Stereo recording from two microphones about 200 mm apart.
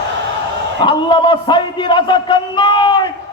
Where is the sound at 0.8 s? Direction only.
25° left (ahead or behind).